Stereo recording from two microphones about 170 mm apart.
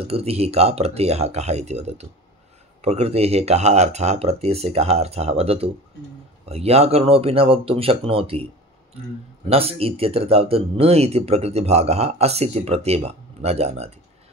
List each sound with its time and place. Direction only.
0.0 s speech: 35° right (ahead or behind)
9.5 s speech: 35° right (ahead or behind)